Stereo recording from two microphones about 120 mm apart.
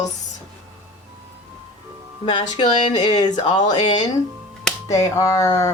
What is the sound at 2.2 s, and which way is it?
Speech, 40° left (ahead or behind).